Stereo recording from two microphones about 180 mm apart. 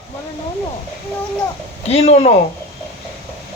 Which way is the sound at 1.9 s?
35° left (ahead or behind).